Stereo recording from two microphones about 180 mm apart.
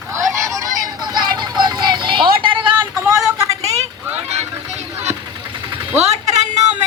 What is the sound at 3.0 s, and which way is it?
Vehicle, 20° right (ahead or behind).